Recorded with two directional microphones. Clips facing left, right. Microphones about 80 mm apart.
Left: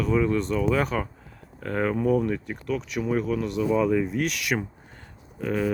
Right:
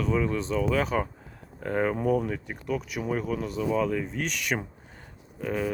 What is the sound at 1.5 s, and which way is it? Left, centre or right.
Speech, centre.